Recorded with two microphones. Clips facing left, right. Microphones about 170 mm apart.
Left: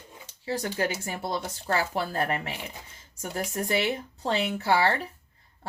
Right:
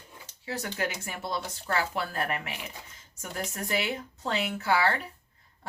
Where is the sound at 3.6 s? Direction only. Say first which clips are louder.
Left 3 dB; 35° left (ahead or behind).